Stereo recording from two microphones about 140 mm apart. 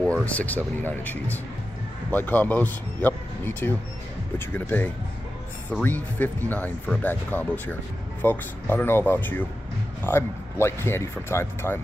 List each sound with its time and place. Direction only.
0.0 s speech: 10° left (ahead or behind)